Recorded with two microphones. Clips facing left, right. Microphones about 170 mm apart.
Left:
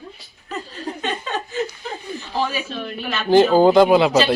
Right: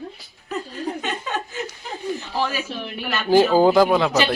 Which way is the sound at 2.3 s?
10° right (ahead or behind).